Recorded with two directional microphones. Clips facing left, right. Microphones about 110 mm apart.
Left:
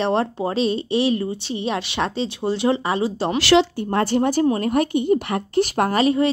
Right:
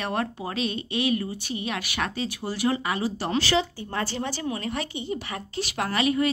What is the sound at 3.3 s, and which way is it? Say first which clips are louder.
Speech: left 10 dB; 80° left.